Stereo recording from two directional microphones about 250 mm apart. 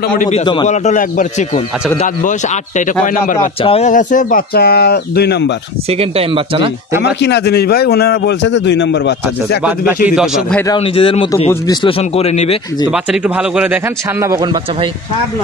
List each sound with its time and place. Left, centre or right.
0.7 s speech: left
3.3 s speech: left
5.9 s speech: right
7.2 s a man's voice: left
10.0 s speech: centre
10.7 s a man's voice: left
12.9 s speech: centre
14.2 s speech: centre